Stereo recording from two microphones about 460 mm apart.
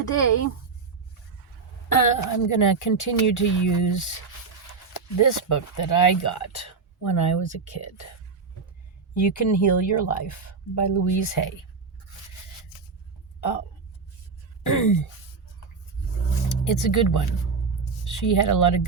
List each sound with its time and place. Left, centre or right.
2.0 s speech: left
9.1 s speech: left
14.6 s a sound: left
16.6 s speech: left